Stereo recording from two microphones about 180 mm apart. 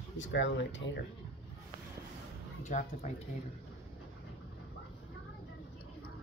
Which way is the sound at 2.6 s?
40° left (ahead or behind).